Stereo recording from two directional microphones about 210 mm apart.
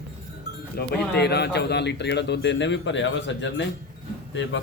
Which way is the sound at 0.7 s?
50° left (ahead or behind).